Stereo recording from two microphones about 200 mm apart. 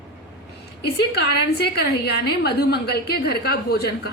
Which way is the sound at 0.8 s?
55° left (ahead or behind).